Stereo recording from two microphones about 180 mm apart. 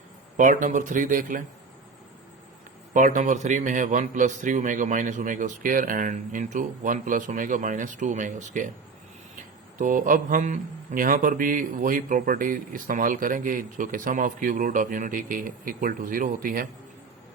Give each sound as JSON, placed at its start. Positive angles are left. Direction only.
{"t": 0.3, "sound": "speech", "side_deg": -45}
{"t": 2.9, "sound": "speech", "side_deg": -45}
{"t": 9.7, "sound": "speech", "side_deg": -45}